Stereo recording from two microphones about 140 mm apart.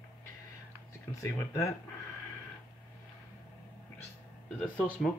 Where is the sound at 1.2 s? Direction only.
20° left (ahead or behind).